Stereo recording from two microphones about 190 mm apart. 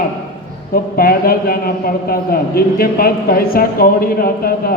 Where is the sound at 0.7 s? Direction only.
50° left (ahead or behind).